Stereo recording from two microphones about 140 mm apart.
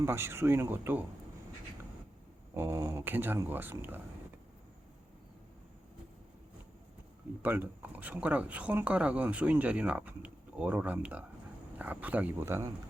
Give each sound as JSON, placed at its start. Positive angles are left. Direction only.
{"t": 0.0, "sound": "speech", "side_deg": -20}
{"t": 2.6, "sound": "speech", "side_deg": -20}
{"t": 7.4, "sound": "speech", "side_deg": -15}